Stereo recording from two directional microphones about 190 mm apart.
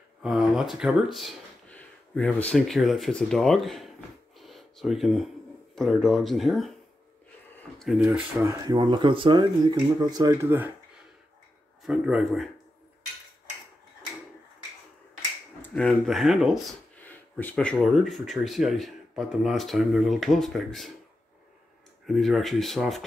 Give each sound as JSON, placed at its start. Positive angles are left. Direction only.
{"t": 0.2, "sound": "speech", "side_deg": 0}
{"t": 4.4, "sound": "a sound", "side_deg": 0}
{"t": 5.8, "sound": "speech", "side_deg": 0}
{"t": 8.0, "sound": "speech", "side_deg": -10}
{"t": 11.8, "sound": "speech", "side_deg": 0}
{"t": 15.6, "sound": "speech", "side_deg": 5}
{"t": 17.0, "sound": "speech", "side_deg": 10}
{"t": 22.0, "sound": "speech", "side_deg": 0}